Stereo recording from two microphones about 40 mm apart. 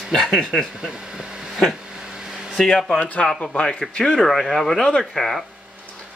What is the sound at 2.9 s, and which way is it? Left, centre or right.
Speech, left.